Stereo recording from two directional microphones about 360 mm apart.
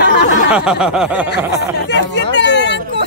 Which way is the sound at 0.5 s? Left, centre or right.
Centre.